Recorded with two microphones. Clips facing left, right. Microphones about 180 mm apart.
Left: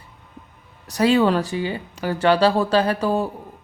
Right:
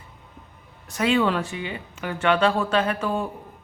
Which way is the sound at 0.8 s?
35° left (ahead or behind).